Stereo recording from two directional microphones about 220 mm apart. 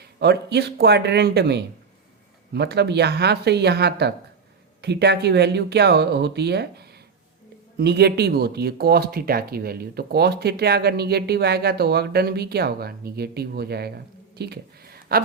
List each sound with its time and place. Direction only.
0.0 s speech: 50° right (ahead or behind)